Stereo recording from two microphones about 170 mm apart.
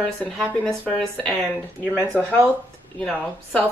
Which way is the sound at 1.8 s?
5° right (ahead or behind).